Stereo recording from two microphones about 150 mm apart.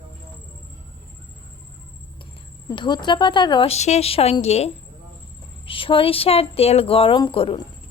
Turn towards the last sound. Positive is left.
turn(degrees=35)  # may be behind; listen again after turning